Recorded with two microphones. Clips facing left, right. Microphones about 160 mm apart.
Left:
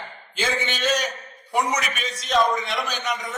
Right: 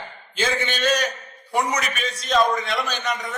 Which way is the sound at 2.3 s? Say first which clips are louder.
Right 1 dB; centre (ahead or behind).